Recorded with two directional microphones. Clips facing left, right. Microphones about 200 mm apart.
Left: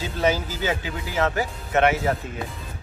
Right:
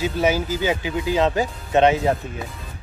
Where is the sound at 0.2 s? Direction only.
10° right (ahead or behind).